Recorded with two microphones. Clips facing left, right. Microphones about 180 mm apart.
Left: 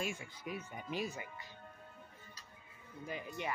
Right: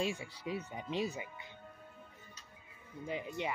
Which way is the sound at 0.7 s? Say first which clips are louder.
Right 2 dB; 25° right (ahead or behind).